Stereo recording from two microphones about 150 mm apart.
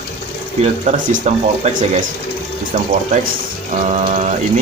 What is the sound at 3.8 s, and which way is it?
Speech, 50° right (ahead or behind).